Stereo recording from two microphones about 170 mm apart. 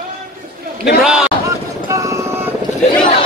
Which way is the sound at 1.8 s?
20° right (ahead or behind).